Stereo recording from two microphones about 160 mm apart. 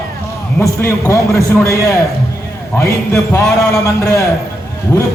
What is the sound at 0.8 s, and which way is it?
A man's voice, 20° left (ahead or behind).